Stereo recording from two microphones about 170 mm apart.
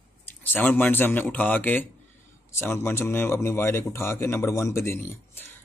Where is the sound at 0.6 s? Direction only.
10° left (ahead or behind).